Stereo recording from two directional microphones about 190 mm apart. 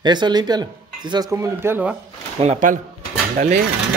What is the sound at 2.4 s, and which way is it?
Speech, 40° right (ahead or behind).